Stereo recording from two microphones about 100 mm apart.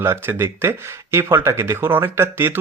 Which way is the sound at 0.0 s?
25° right (ahead or behind).